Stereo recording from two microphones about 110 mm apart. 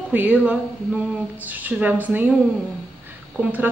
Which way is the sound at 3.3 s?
15° right (ahead or behind).